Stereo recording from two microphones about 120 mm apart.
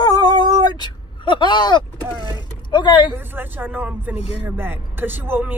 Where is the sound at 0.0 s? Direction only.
35° left (ahead or behind).